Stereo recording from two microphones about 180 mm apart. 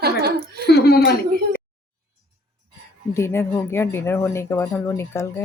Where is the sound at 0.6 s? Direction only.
65° left (ahead or behind).